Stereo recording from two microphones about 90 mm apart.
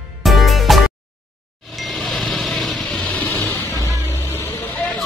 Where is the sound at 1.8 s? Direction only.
Centre (ahead or behind).